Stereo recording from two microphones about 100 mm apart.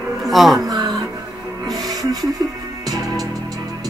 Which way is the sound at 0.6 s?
40° right (ahead or behind).